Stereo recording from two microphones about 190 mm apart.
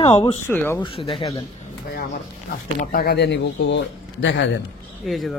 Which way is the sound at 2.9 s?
55° left (ahead or behind).